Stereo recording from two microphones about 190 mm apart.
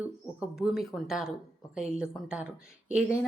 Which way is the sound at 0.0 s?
5° right (ahead or behind).